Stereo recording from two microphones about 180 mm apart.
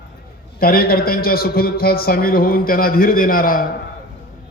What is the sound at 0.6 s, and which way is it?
A man's voice, 55° left (ahead or behind).